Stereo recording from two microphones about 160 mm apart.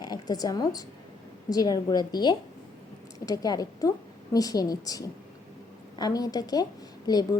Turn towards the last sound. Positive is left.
turn(degrees=25)  # may be behind; listen again after turning